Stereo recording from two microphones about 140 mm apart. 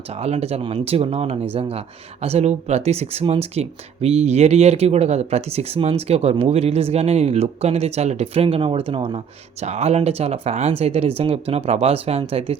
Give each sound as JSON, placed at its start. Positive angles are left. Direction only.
{"t": 0.1, "sound": "speech", "side_deg": -50}